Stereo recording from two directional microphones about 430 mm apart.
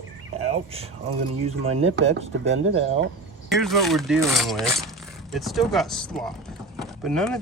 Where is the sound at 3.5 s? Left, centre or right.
Centre.